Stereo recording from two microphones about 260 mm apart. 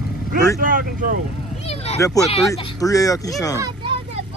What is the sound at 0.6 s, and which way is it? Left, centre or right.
Speech, right.